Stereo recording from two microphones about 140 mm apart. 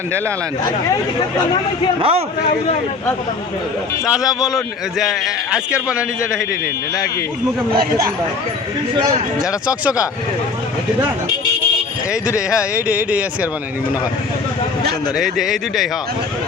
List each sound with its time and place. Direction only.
2.0 s a man's voice: 40° right (ahead or behind)
4.0 s a man's voice: centre (ahead or behind)
12.5 s speech: 10° right (ahead or behind)
15.2 s a man's voice: centre (ahead or behind)